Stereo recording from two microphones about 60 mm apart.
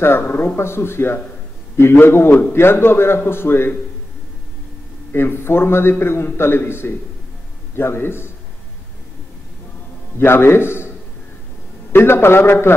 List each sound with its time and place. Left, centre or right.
0.0 s a man's voice: left
0.6 s a man's voice: left
5.1 s a man's voice: left
10.1 s a man's voice: left
11.9 s a man's voice: left